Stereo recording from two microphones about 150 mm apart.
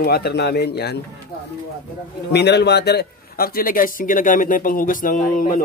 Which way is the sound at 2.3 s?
90° left.